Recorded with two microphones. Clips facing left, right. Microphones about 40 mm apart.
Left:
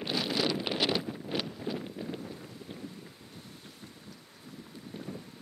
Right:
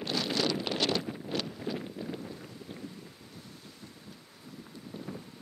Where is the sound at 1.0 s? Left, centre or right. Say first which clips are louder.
Even; centre.